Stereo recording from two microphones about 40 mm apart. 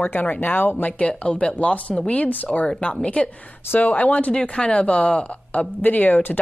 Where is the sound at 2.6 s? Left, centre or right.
Left.